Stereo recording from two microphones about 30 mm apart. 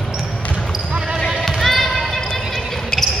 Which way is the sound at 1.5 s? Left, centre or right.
Centre.